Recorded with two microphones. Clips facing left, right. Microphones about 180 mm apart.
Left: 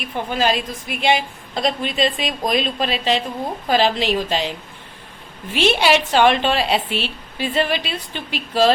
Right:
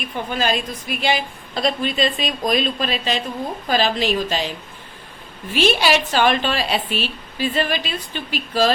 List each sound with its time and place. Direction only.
0.0 s a woman's voice: 25° left (ahead or behind)
5.5 s a woman's voice: 25° left (ahead or behind)